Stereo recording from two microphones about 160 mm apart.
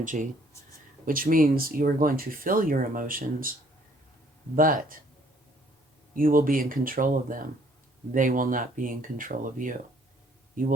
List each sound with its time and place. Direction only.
0.0 s speech: 55° right (ahead or behind)
4.5 s speech: 60° right (ahead or behind)
6.1 s speech: 60° right (ahead or behind)